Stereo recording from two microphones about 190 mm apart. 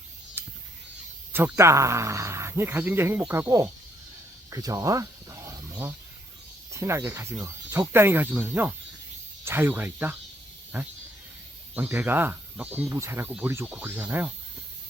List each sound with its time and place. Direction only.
0.4 s a sound: 15° right (ahead or behind)
1.3 s speech: 10° right (ahead or behind)
4.5 s snake: 15° right (ahead or behind)
6.7 s speech: 15° right (ahead or behind)